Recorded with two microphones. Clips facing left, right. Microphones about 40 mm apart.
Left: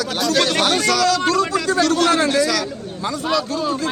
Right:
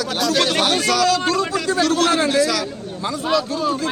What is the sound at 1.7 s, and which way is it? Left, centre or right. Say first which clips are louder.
A man's voice: left 1 dB; centre.